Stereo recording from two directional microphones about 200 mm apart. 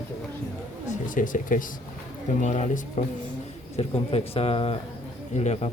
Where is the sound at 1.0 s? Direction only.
40° left (ahead or behind).